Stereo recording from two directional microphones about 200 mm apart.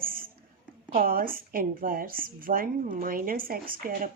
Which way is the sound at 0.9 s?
45° right (ahead or behind).